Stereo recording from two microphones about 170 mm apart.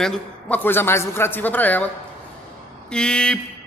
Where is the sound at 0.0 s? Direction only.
5° left (ahead or behind).